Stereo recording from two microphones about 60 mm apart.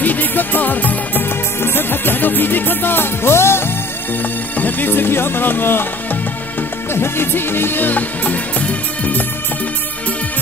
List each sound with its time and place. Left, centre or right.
0.0 s music: left
4.2 s speech: left
6.9 s music: left